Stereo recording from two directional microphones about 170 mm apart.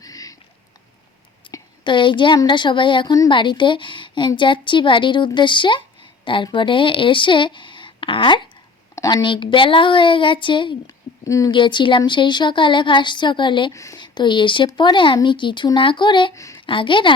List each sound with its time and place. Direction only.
0.0 s a sound: 20° left (ahead or behind)
1.5 s a woman's voice: 25° left (ahead or behind)
16.6 s speech: 30° left (ahead or behind)